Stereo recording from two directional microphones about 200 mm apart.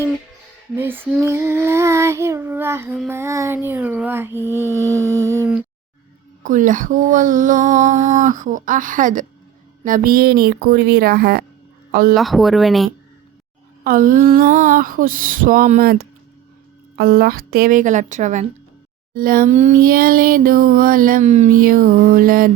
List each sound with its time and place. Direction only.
0.8 s child singing: 10° right (ahead or behind)
6.4 s speech: 40° right (ahead or behind)
9.8 s a sound: 45° right (ahead or behind)
11.9 s speech: 45° right (ahead or behind)
12.1 s speech: centre (ahead or behind)
13.8 s a sound: 45° right (ahead or behind)